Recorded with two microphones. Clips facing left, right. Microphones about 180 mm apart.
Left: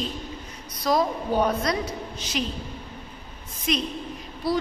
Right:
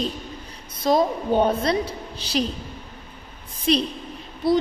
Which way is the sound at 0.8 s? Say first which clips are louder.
Right 3 dB; 25° right (ahead or behind).